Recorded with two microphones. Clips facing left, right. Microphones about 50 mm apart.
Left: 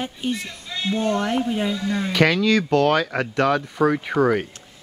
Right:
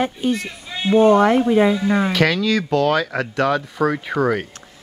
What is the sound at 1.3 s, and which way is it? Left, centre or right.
Speech, right.